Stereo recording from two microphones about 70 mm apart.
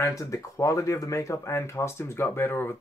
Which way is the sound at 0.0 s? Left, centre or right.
Left.